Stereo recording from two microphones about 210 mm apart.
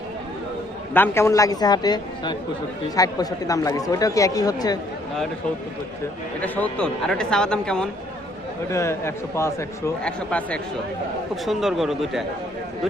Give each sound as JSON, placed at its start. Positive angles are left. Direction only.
{"t": 0.9, "sound": "speech", "side_deg": 10}
{"t": 6.4, "sound": "speech", "side_deg": 5}